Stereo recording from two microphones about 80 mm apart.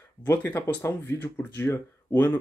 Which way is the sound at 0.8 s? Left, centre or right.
Left.